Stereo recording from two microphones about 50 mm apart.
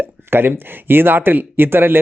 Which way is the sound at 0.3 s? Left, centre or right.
Right.